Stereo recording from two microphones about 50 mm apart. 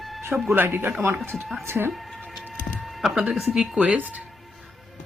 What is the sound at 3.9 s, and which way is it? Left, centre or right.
Speech, right.